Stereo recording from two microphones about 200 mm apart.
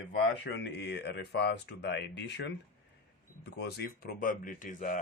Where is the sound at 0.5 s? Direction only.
60° left (ahead or behind); by 5.0 s 40° left (ahead or behind).